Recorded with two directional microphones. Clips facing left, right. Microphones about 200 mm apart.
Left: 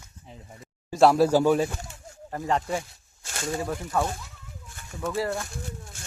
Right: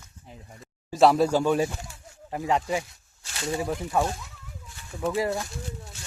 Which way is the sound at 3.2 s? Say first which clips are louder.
Even; 50° left (ahead or behind).